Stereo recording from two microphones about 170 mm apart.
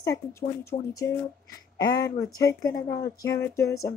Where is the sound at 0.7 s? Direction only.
40° left (ahead or behind).